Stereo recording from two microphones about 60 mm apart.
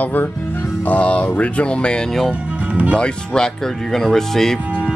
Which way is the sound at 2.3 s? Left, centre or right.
Right.